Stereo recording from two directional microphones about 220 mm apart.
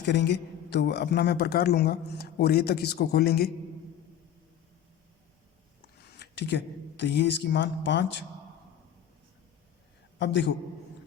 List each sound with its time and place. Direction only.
0.0 s a man's voice: 50° left (ahead or behind)
6.1 s speech: 50° left (ahead or behind)
10.2 s a man's voice: 55° left (ahead or behind)